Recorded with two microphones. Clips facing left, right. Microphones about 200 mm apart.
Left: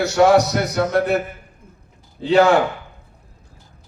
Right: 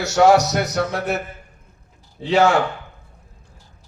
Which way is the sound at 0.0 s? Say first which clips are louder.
Left 1 dB; 60° left (ahead or behind).